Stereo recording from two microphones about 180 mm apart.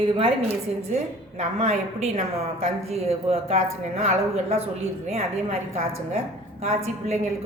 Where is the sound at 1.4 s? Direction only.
35° right (ahead or behind).